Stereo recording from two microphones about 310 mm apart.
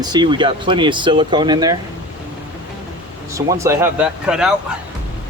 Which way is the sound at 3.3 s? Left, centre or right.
Centre.